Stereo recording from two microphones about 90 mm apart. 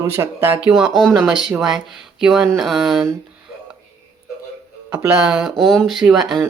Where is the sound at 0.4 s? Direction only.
20° right (ahead or behind).